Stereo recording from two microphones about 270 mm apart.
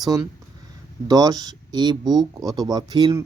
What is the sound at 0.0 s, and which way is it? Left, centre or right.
Speech, centre.